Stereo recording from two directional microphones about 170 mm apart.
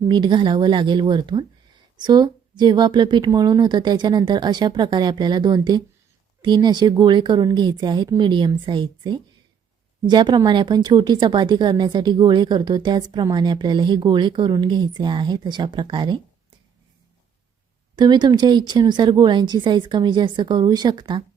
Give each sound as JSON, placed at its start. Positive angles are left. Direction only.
{"t": 0.1, "sound": "speech", "side_deg": -25}
{"t": 17.9, "sound": "speech", "side_deg": -25}